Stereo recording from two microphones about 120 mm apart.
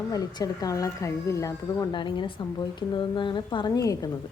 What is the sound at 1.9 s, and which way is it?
A woman's voice, 40° left (ahead or behind).